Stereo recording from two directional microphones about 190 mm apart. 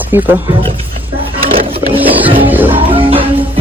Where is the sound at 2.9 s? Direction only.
30° right (ahead or behind).